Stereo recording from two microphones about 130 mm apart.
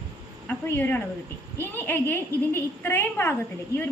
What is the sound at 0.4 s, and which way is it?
A woman's voice, 15° left (ahead or behind).